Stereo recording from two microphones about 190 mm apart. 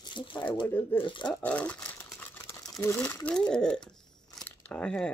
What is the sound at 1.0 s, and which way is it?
Speech, 25° left (ahead or behind).